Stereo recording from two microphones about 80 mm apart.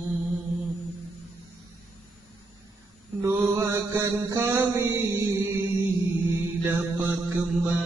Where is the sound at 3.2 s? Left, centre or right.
Right.